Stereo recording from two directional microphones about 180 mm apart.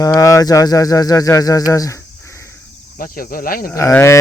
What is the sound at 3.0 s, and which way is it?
Speech, 50° left (ahead or behind).